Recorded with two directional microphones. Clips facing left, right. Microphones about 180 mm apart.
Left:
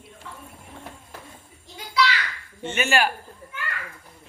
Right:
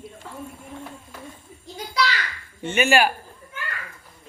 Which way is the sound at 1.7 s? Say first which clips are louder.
Left 1 dB; 40° right (ahead or behind).